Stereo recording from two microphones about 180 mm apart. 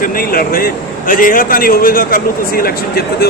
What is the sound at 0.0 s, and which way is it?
A man's voice, 55° left (ahead or behind).